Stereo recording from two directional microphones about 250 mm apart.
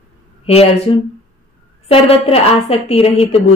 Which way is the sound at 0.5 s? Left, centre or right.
Left.